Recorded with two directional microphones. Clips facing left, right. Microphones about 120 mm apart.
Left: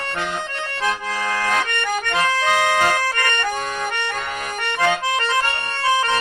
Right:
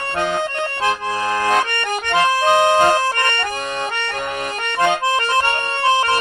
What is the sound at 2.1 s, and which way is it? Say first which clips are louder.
Accordion: right 6 dB; 50° right (ahead or behind).